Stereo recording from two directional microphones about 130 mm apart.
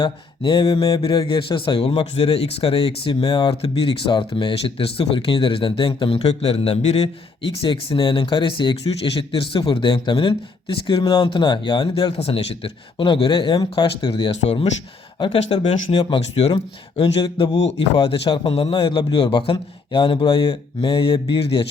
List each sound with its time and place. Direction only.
0.0 s speech: 40° left (ahead or behind)
12.1 s speech: 50° left (ahead or behind)